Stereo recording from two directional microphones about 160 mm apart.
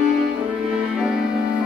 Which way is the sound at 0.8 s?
5° right (ahead or behind).